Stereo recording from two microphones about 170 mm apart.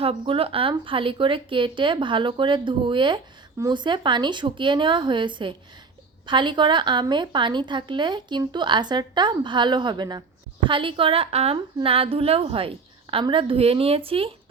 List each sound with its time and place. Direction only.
0.0 s a woman's voice: 35° right (ahead or behind)